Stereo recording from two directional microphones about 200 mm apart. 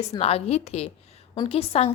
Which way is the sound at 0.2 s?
30° left (ahead or behind).